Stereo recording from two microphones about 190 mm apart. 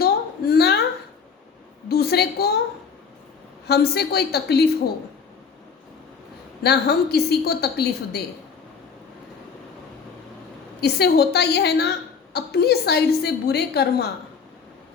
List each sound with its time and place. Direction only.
0.0 s a sound: 55° left (ahead or behind)
1.9 s a woman's voice: 55° left (ahead or behind)
3.7 s a woman's voice: 60° left (ahead or behind)
6.6 s a woman's voice: 55° left (ahead or behind)
10.8 s a woman's voice: 60° left (ahead or behind)